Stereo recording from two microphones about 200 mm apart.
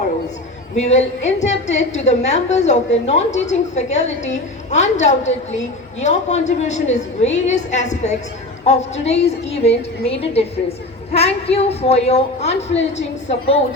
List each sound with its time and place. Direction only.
0.8 s a woman's voice: 35° left (ahead or behind)